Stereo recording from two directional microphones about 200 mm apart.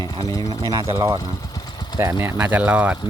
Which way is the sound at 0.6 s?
20° right (ahead or behind).